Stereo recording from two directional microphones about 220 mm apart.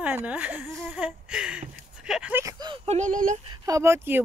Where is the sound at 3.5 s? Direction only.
15° right (ahead or behind).